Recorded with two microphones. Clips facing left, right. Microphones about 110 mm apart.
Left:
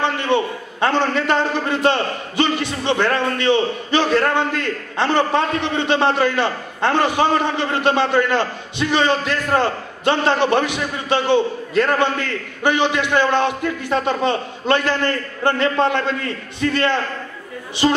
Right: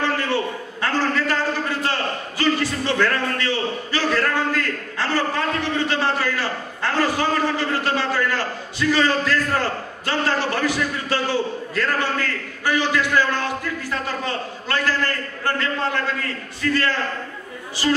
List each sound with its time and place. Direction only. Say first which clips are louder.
0.0 s a man's voice: left 3 dB; 20° left (ahead or behind)